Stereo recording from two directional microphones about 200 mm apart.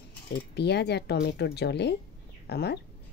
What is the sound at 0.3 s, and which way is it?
Speech, 55° left (ahead or behind).